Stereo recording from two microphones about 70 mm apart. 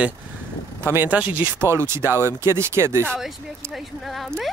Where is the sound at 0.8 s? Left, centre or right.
Right.